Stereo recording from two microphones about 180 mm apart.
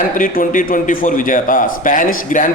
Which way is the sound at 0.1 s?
50° left (ahead or behind).